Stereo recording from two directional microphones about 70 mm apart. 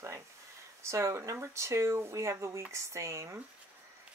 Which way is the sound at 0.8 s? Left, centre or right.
Right.